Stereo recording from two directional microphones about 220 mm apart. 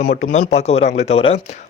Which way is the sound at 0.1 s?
35° left (ahead or behind).